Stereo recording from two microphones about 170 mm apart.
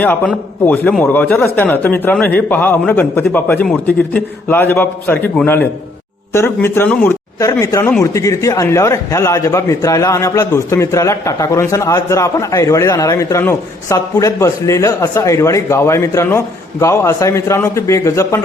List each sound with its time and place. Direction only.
0.0 s a man's voice: 10° left (ahead or behind)